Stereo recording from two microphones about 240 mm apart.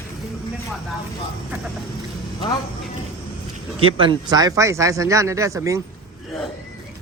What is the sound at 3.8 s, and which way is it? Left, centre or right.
Speech, centre.